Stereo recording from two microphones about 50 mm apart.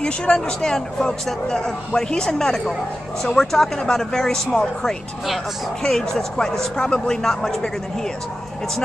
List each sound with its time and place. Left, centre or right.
0.0 s speech: centre